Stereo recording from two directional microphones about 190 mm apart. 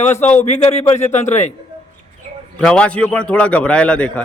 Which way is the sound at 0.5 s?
35° left (ahead or behind).